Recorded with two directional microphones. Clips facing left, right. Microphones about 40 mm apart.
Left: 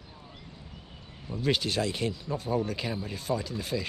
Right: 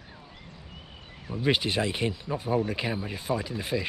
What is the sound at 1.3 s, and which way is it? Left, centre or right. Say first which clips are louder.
Speech: right 2 dB; right.